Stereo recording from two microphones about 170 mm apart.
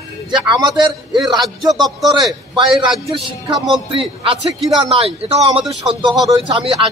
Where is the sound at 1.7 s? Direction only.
Centre (ahead or behind).